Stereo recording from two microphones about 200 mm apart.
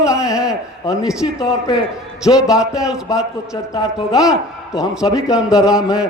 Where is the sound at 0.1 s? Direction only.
5° right (ahead or behind).